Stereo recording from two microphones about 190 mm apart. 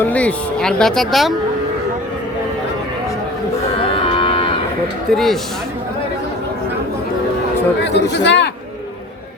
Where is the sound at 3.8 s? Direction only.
30° left (ahead or behind).